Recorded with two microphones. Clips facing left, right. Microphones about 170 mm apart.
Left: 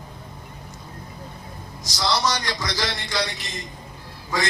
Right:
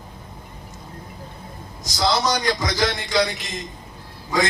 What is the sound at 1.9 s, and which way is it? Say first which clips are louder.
A man's voice: right 3 dB; 50° right (ahead or behind).